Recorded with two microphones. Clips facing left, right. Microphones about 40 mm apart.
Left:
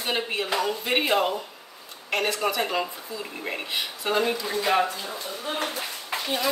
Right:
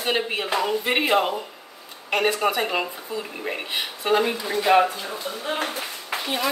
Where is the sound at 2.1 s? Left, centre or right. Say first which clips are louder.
Right 4 dB; centre.